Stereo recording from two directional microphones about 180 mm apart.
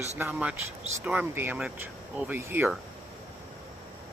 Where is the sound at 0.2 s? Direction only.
10° right (ahead or behind).